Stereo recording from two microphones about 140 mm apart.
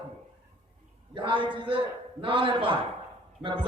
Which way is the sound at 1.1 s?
35° right (ahead or behind).